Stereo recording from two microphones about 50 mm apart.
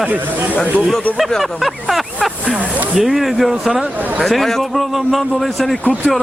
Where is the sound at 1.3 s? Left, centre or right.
Centre.